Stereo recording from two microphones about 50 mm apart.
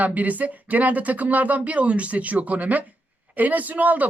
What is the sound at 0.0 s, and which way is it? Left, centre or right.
Speech, right.